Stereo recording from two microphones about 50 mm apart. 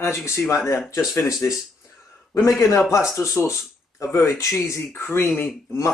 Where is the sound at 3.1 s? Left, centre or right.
Left.